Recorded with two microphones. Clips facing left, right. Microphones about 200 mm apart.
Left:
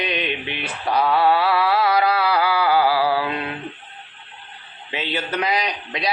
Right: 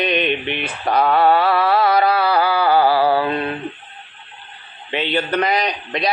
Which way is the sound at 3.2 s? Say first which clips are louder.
Right 5 dB; 10° left (ahead or behind).